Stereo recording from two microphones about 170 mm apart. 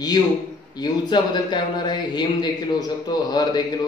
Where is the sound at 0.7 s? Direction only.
25° left (ahead or behind).